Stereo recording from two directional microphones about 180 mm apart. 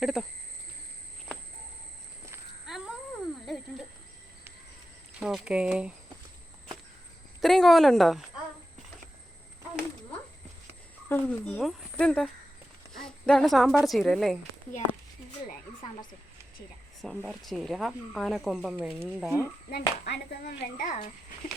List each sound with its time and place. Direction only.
0.0 s speech: centre (ahead or behind)
2.6 s a sound: centre (ahead or behind)
5.2 s speech: 5° right (ahead or behind)
7.4 s speech: centre (ahead or behind)
11.1 s a woman's voice: 5° left (ahead or behind)
17.0 s speech: centre (ahead or behind)
19.7 s a child's voice: 60° left (ahead or behind)